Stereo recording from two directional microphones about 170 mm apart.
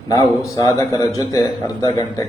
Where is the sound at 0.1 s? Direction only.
20° left (ahead or behind).